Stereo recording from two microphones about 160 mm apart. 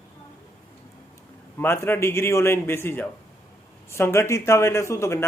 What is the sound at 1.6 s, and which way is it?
A man's voice, 15° left (ahead or behind).